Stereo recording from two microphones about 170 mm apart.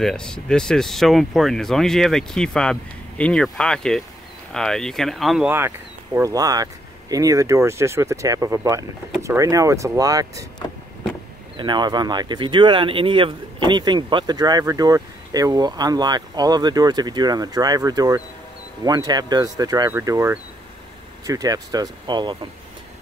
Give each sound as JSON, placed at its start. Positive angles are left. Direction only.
{"t": 0.0, "sound": "speech", "side_deg": 5}
{"t": 6.1, "sound": "speech", "side_deg": -20}
{"t": 11.5, "sound": "speech", "side_deg": -25}